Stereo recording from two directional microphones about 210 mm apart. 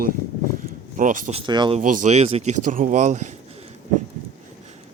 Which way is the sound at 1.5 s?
20° right (ahead or behind).